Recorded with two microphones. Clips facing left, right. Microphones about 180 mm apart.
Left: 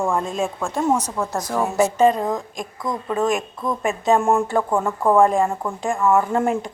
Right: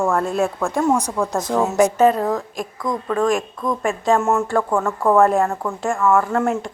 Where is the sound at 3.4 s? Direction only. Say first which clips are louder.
Right 2 dB; 5° left (ahead or behind).